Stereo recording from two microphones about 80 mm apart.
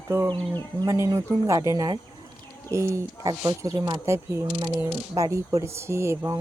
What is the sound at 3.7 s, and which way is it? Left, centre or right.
Speech, right.